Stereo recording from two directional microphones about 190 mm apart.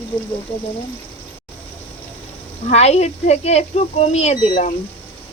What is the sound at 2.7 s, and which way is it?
Speech, 35° left (ahead or behind).